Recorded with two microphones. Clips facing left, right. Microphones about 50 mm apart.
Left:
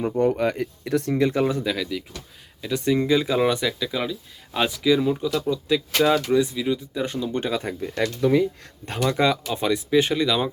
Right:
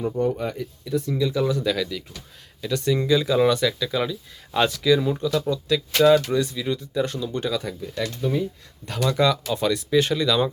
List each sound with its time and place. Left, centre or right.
0.2 s speech: left
1.1 s speech: left
1.6 s speech: centre; by 7.8 s left
7.8 s speech: left
8.2 s speech: left
9.0 s speech: left